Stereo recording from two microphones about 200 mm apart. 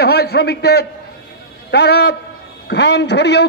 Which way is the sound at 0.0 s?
55° left (ahead or behind).